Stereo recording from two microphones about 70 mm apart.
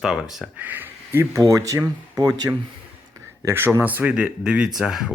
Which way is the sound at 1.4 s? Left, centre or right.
Right.